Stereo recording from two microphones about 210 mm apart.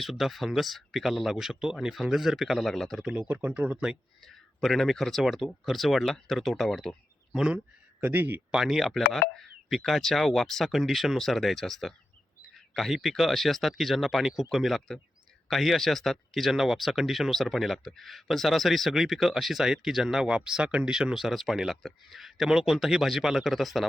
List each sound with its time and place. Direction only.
0.0 s speech: centre (ahead or behind)